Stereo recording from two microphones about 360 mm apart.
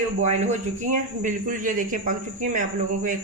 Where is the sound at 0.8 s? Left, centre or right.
Right.